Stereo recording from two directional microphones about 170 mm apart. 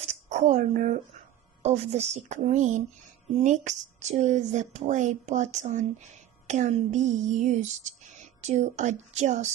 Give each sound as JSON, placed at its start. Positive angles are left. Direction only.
{"t": 0.3, "sound": "speech", "side_deg": -45}